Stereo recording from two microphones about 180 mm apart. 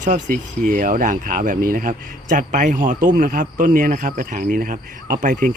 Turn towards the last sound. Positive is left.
turn(degrees=-50)  # may be behind; listen again after turning